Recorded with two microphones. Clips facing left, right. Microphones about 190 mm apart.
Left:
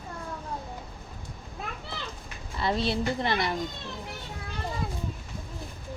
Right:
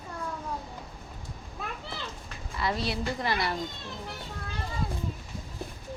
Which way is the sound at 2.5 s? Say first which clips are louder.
Left 3 dB; 25° left (ahead or behind).